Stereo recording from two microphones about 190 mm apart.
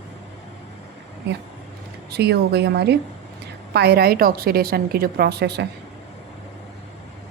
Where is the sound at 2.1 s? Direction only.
60° right (ahead or behind).